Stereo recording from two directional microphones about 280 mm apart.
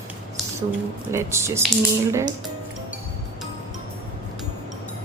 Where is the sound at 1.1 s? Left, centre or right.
Centre.